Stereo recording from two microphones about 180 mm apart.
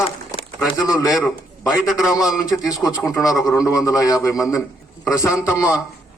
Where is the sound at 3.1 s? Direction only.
15° left (ahead or behind).